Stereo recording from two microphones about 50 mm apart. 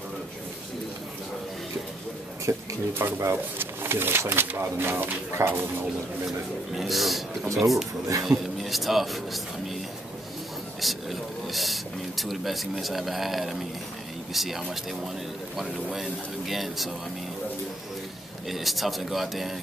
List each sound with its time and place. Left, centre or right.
2.5 s speech: right
2.9 s speech: right
3.5 s pigeon: right
4.2 s speech: right
4.6 s speech: right
6.7 s speech: centre
10.8 s speech: centre
18.5 s speech: centre